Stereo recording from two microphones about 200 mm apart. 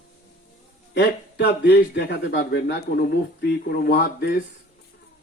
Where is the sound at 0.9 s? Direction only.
55° left (ahead or behind).